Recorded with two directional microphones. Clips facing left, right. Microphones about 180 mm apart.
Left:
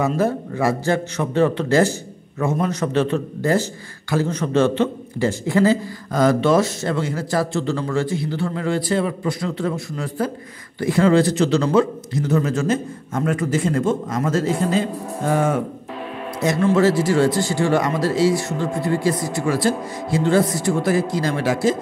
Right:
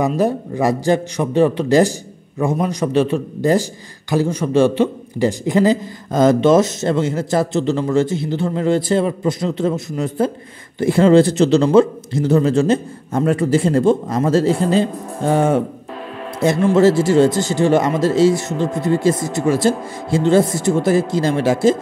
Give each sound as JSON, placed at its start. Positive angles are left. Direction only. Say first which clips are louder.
{"t": 0.0, "sound": "a man's voice", "louder": "right 3 dB", "side_deg": -15}
{"t": 16.7, "sound": "a man's voice", "louder": "right 5 dB", "side_deg": -25}